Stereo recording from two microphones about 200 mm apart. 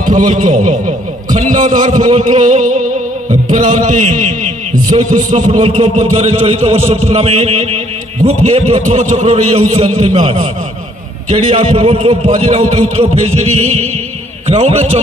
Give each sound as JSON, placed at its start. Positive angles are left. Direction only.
{"t": 0.0, "sound": "a man's voice", "side_deg": -40}